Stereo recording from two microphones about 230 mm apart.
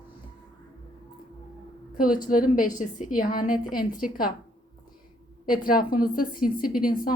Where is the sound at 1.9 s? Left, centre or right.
Left.